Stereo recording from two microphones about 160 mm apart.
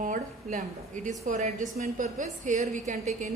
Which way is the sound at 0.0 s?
55° right (ahead or behind).